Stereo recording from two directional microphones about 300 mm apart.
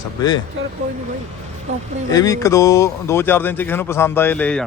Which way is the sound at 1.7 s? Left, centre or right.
Right.